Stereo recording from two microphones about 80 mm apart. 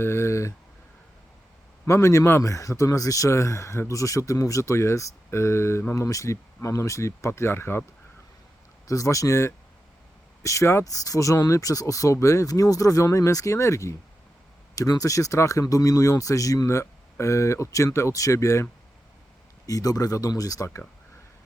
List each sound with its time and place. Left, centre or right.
0.0 s speech: left
1.8 s speech: left
8.9 s speech: left
10.8 s speech: left
19.6 s speech: left